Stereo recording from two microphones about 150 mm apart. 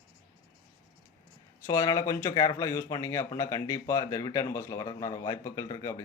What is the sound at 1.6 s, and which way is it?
Speech, 20° left (ahead or behind).